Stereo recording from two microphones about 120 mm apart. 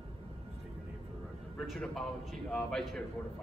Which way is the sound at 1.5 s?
Centre (ahead or behind).